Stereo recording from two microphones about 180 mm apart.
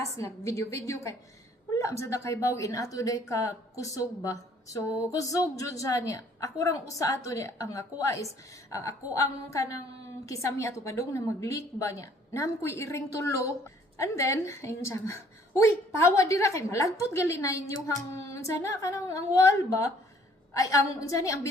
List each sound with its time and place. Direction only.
0.2 s a woman's voice: 15° left (ahead or behind)